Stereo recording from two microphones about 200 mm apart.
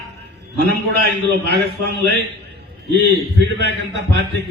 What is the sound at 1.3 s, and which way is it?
Speech, 55° right (ahead or behind).